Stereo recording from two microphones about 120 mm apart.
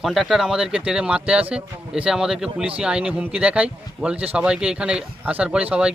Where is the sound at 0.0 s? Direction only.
Centre (ahead or behind).